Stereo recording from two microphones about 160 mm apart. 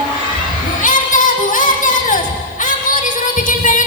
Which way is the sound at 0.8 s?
55° left (ahead or behind).